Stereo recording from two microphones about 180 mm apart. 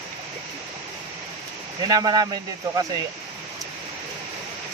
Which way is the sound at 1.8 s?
20° right (ahead or behind).